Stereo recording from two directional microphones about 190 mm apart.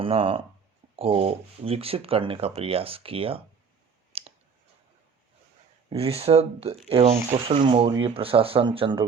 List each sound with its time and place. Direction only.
0.0 s speech: 30° right (ahead or behind)
4.1 s clicking: 30° right (ahead or behind)
5.9 s speech: 30° right (ahead or behind)